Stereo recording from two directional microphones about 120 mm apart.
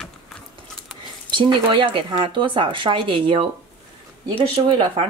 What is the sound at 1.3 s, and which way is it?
Speech, 40° right (ahead or behind).